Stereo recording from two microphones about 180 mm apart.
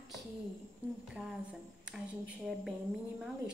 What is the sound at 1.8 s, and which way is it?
Speech, 5° right (ahead or behind).